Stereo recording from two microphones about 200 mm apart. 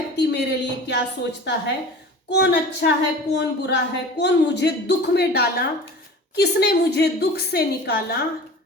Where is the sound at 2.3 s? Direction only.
55° left (ahead or behind).